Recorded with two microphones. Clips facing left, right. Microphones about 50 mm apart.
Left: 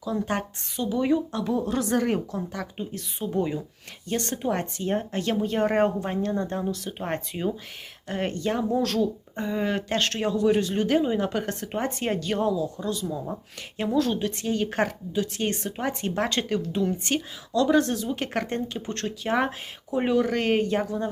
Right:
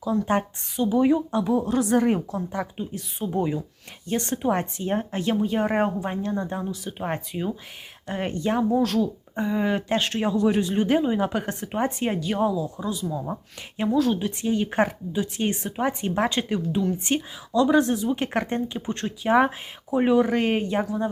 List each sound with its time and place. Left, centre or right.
0.0 s a woman's voice: centre
4.2 s a woman's voice: centre
5.3 s a woman's voice: centre
8.1 s a woman's voice: centre
17.0 s a woman's voice: centre